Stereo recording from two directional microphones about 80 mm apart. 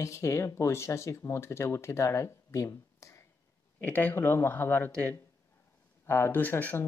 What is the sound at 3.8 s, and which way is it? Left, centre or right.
Speech, centre.